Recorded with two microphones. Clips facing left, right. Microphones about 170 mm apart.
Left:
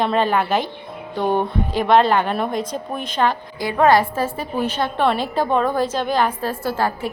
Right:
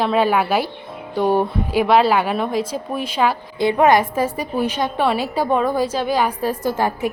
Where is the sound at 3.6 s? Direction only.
20° right (ahead or behind).